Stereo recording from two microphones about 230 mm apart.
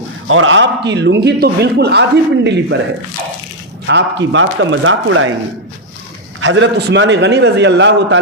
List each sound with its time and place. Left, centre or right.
0.3 s a man's voice: right
3.8 s a man's voice: right
6.4 s a man's voice: right